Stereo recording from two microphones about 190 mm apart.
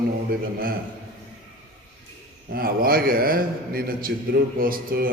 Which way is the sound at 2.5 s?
50° right (ahead or behind).